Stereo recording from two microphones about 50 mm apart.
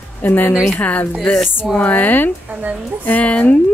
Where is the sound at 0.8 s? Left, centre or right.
Left.